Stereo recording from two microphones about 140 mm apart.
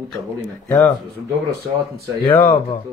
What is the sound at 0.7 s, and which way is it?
Speech, 10° left (ahead or behind).